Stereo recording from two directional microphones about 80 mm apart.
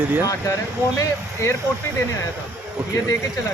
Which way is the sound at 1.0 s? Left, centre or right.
Left.